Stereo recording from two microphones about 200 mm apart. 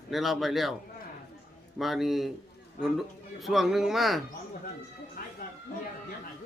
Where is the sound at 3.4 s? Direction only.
Centre (ahead or behind).